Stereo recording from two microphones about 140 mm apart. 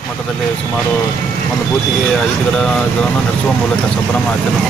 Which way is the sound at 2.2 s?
5° left (ahead or behind).